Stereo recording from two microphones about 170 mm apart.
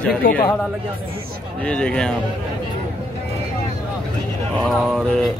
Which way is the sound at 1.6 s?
5° left (ahead or behind).